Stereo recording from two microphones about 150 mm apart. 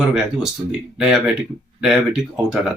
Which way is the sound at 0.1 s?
5° right (ahead or behind).